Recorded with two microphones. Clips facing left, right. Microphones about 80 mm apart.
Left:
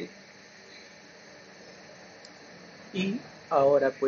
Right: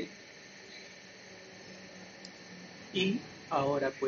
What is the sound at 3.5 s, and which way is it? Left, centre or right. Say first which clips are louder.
Speech: left 9 dB; left.